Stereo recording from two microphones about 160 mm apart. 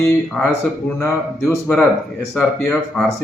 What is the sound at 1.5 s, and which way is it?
Speech, 10° left (ahead or behind).